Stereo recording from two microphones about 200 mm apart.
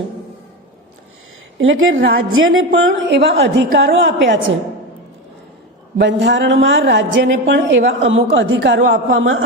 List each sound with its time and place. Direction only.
1.5 s a woman's voice: 70° right (ahead or behind); by 3.9 s 55° right (ahead or behind)
3.9 s a woman's voice: 65° right (ahead or behind)
6.0 s a woman's voice: 65° right (ahead or behind)